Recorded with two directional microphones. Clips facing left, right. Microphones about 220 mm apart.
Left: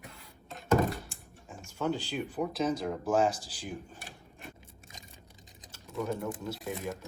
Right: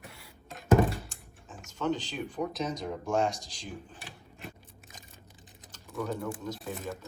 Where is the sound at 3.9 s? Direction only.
45° left (ahead or behind).